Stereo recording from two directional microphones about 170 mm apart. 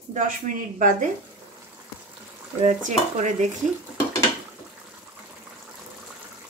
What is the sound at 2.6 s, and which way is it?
Speech, 45° right (ahead or behind).